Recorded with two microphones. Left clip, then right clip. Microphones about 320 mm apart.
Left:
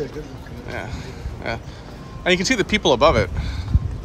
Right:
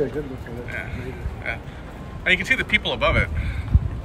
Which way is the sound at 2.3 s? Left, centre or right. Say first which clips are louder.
Even; centre.